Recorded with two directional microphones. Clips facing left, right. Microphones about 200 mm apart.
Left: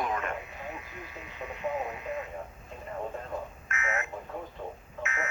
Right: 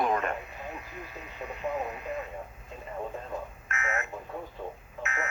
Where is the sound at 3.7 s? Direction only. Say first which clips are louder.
Even; 35° right (ahead or behind).